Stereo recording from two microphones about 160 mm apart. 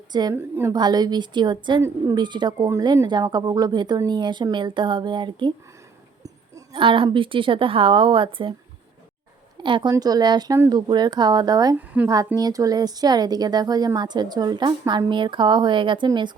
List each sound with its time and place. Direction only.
0.1 s a woman's voice: 25° right (ahead or behind)
0.3 s a woman's voice: 15° right (ahead or behind)
0.7 s a woman's voice: 25° right (ahead or behind)
1.8 s a woman's voice: 20° right (ahead or behind)
2.2 s a woman's voice: 30° right (ahead or behind)
6.7 s a woman's voice: 35° right (ahead or behind)
9.6 s a woman's voice: 30° right (ahead or behind)